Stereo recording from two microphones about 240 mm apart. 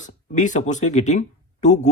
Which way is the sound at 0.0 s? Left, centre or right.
Left.